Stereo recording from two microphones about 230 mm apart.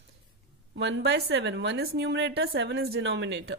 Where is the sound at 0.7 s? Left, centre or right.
Right.